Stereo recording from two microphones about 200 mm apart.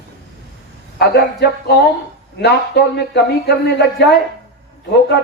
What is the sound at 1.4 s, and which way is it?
A man's voice, 55° left (ahead or behind).